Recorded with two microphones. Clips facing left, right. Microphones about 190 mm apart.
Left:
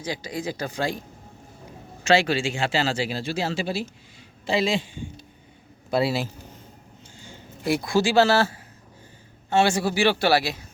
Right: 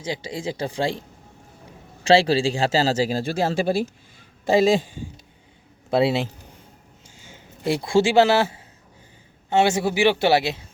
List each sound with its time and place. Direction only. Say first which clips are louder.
0.0 s a man's voice: right 1 dB; 25° right (ahead or behind)
2.0 s a man's voice: right 4 dB; 35° right (ahead or behind)
5.9 s a man's voice: right 3 dB; 25° right (ahead or behind)
7.3 s a man's voice: right 1 dB; 25° right (ahead or behind)